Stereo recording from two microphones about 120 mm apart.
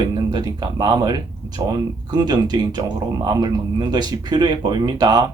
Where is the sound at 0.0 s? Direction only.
35° right (ahead or behind).